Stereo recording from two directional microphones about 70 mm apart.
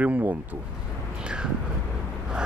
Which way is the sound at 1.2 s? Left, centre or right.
Centre.